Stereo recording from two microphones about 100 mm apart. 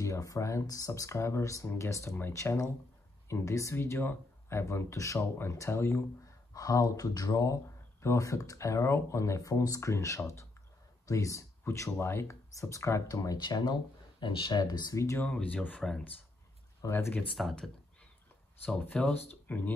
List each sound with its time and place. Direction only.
0.0 s speech: 30° left (ahead or behind)
6.5 s speech: 35° left (ahead or behind)
13.4 s speech: 45° left (ahead or behind)
14.6 s speech: 40° left (ahead or behind)
15.1 s speech: 15° left (ahead or behind)
16.8 s speech: 25° left (ahead or behind)
17.4 s speech: centre (ahead or behind)
18.7 s speech: 10° left (ahead or behind)